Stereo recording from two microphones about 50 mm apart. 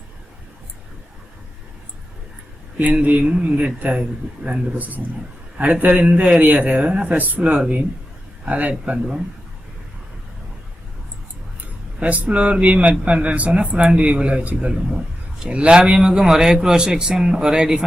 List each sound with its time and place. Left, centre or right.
2.7 s speech: right
5.8 s speech: right
11.9 s a man's voice: right